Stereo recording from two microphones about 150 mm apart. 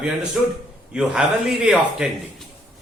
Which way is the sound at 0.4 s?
5° right (ahead or behind).